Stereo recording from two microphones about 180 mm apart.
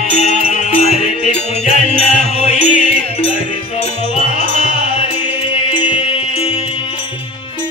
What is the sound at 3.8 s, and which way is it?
Music, 35° left (ahead or behind).